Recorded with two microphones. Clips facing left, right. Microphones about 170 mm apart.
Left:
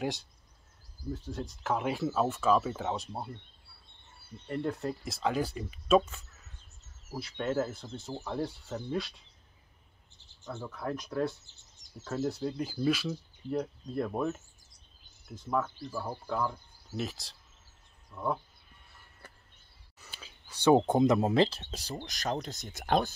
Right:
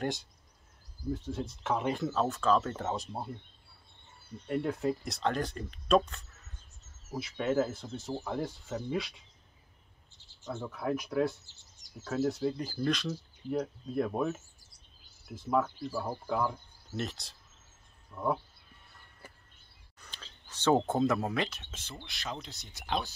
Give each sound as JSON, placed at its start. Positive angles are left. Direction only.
{"t": 0.0, "sound": "speech", "side_deg": 0}
{"t": 4.5, "sound": "speech", "side_deg": 0}
{"t": 10.5, "sound": "speech", "side_deg": -5}
{"t": 15.9, "sound": "speech", "side_deg": -5}
{"t": 20.0, "sound": "a sound", "side_deg": 10}
{"t": 21.4, "sound": "speech", "side_deg": 35}